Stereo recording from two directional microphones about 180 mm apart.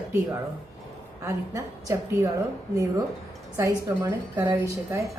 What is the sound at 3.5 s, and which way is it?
A woman's voice, 20° right (ahead or behind).